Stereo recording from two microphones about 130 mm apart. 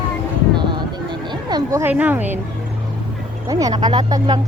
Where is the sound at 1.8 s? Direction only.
10° right (ahead or behind).